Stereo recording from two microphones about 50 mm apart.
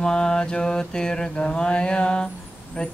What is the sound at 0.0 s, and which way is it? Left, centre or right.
Mantra, centre.